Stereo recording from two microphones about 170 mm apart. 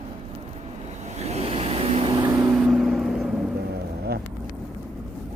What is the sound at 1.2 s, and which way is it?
Vehicle, 35° right (ahead or behind).